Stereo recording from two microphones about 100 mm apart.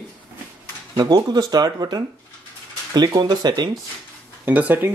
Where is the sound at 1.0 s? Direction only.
40° right (ahead or behind).